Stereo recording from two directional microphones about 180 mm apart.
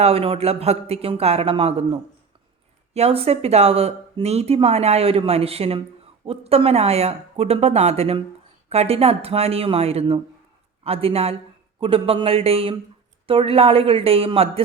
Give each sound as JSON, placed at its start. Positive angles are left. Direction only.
{"t": 0.0, "sound": "speech", "side_deg": -30}